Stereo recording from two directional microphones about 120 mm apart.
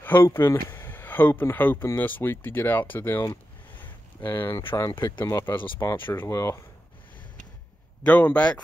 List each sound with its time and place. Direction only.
0.0 s speech: 15° left (ahead or behind)
3.8 s a sound: 40° left (ahead or behind)
4.5 s speech: 40° left (ahead or behind)
5.2 s speech: 25° left (ahead or behind)
8.0 s speech: 10° left (ahead or behind)